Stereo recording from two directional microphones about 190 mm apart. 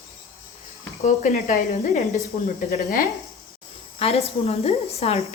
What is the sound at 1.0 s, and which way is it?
Speech, 40° left (ahead or behind).